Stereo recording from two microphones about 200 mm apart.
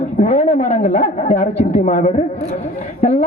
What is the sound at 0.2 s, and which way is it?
A man's voice, 35° left (ahead or behind).